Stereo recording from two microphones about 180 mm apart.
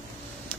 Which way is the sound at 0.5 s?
10° left (ahead or behind).